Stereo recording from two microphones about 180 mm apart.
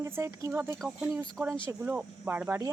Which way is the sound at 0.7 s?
5° right (ahead or behind).